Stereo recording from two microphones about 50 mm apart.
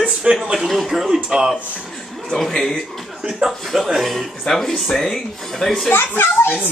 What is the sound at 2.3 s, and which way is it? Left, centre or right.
A man's voice, centre.